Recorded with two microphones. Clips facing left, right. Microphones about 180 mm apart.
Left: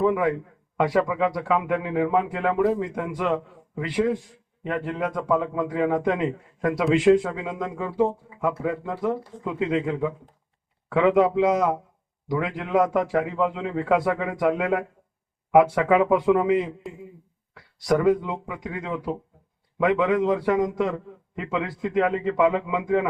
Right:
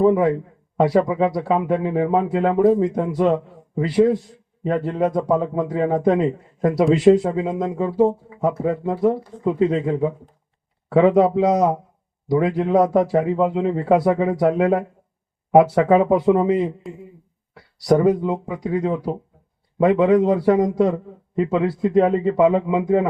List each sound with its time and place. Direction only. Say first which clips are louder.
0.0 s a man's voice: right 6 dB; 35° right (ahead or behind)
17.7 s speech: right 4 dB; 35° right (ahead or behind)